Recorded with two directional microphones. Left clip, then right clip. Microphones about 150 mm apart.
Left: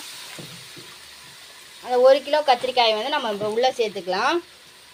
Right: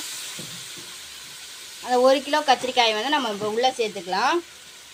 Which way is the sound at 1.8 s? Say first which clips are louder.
Left 2 dB; centre (ahead or behind).